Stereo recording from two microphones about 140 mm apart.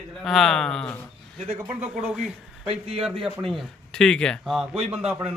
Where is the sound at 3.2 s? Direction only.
Centre (ahead or behind).